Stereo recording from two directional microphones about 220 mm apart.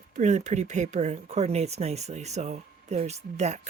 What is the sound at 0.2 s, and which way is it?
Speech, 30° right (ahead or behind).